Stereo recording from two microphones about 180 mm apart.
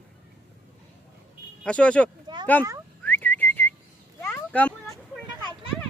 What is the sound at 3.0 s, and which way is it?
Whistling, 10° left (ahead or behind).